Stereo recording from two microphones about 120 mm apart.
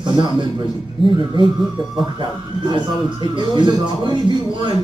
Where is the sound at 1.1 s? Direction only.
40° right (ahead or behind).